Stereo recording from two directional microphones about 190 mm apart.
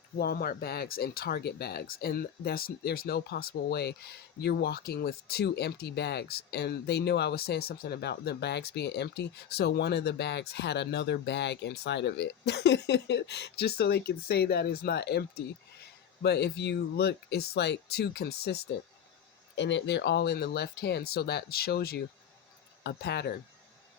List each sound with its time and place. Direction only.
0.2 s speech: 50° left (ahead or behind)
19.5 s speech: 70° left (ahead or behind)